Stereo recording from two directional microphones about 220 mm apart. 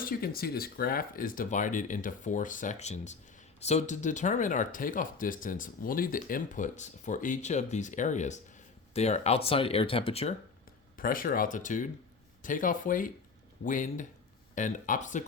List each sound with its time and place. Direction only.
0.0 s speech: 40° left (ahead or behind); by 10.3 s 25° left (ahead or behind)
10.9 s speech: 40° left (ahead or behind)